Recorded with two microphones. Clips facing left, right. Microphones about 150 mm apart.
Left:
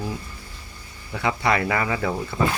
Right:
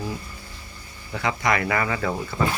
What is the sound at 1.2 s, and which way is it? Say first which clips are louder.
Speech: left 1 dB; 25° left (ahead or behind).